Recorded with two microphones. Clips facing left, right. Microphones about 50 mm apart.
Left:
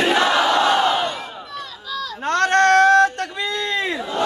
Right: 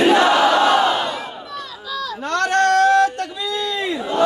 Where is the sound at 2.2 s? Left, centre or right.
Left.